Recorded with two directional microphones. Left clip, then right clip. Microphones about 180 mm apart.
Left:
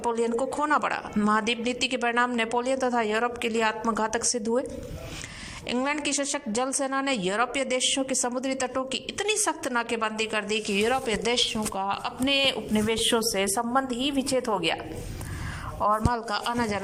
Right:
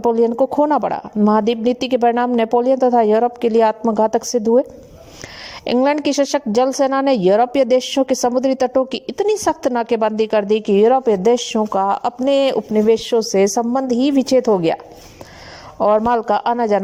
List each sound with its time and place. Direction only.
0.0 s a woman's voice: 45° right (ahead or behind)
5.6 s a woman's voice: 55° right (ahead or behind); by 14.8 s 30° right (ahead or behind)
15.8 s a woman's voice: 35° right (ahead or behind)